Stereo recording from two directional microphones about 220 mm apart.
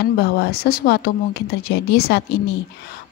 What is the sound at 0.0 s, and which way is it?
Speech, 45° left (ahead or behind).